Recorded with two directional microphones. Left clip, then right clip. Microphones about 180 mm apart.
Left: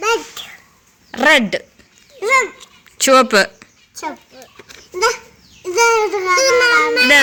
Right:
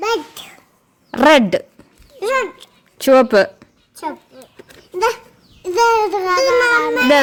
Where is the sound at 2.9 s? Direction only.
25° right (ahead or behind).